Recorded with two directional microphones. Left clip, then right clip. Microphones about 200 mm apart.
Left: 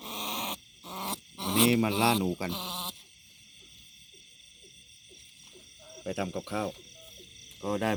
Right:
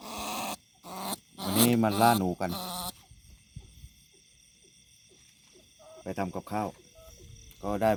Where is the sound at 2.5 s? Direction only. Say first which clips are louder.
Left 1 dB; 20° right (ahead or behind).